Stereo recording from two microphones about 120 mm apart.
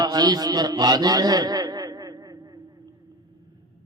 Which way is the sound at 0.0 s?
30° right (ahead or behind).